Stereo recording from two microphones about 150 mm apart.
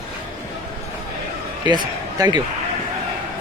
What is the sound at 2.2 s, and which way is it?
Speech, 25° right (ahead or behind).